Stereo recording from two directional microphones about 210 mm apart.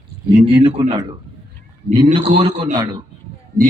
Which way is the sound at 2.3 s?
35° right (ahead or behind).